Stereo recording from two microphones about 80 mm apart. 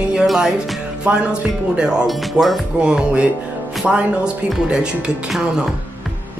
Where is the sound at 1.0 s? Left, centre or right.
Centre.